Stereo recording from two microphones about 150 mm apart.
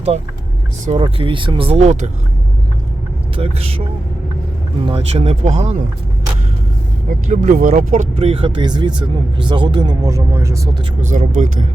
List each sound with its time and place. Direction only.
0.9 s speech: 35° right (ahead or behind)
3.3 s speech: 40° right (ahead or behind)
4.9 s speech: 40° right (ahead or behind)
7.3 s speech: 65° right (ahead or behind); by 10.7 s 20° right (ahead or behind)
11.1 s speech: 60° right (ahead or behind)